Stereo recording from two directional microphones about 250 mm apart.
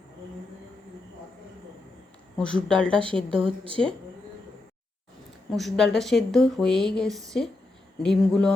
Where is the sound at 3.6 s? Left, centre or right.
Right.